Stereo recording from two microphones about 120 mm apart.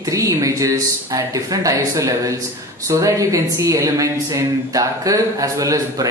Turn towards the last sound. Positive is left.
turn(degrees=-30)  # may be behind; listen again after turning